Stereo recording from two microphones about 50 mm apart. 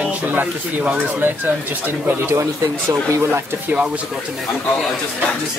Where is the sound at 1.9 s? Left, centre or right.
Right.